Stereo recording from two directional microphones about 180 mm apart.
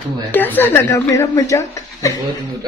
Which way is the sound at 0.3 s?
10° left (ahead or behind).